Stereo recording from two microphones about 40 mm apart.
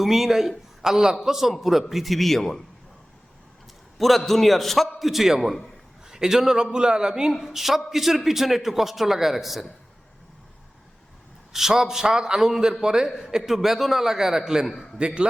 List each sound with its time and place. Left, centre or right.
0.0 s a man's voice: centre
3.9 s a man's voice: centre
11.5 s a man's voice: centre